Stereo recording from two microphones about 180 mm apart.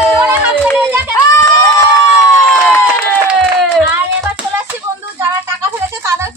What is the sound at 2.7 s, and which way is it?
Run, 10° left (ahead or behind).